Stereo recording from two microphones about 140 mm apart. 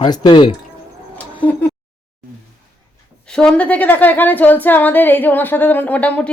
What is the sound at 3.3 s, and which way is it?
A woman's voice, 5° left (ahead or behind).